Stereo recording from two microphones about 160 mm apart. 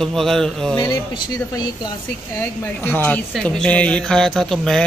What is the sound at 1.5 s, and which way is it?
Speech, 25° left (ahead or behind).